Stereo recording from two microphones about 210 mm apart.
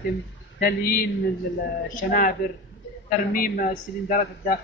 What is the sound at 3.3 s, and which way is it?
Speech, 40° left (ahead or behind).